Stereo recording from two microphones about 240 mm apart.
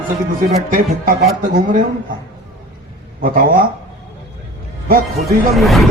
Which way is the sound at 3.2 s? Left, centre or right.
Right.